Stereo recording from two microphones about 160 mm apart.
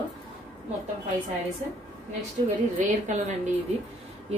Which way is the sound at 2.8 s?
45° right (ahead or behind).